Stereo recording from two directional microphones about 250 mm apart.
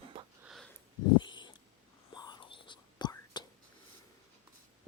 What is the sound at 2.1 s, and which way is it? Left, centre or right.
Whispering, centre.